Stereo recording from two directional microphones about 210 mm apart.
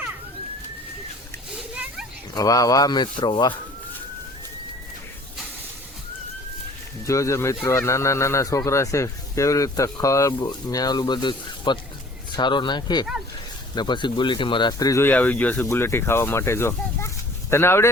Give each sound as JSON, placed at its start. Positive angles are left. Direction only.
{"t": 1.5, "sound": "children playing", "side_deg": -5}
{"t": 2.3, "sound": "speech", "side_deg": 15}
{"t": 7.0, "sound": "speech", "side_deg": 15}